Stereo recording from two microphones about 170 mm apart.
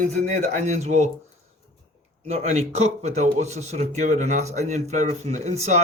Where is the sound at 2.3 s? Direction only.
40° right (ahead or behind).